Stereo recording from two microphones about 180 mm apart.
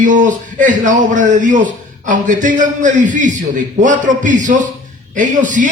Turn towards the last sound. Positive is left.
turn(degrees=-45)  # may be behind; listen again after turning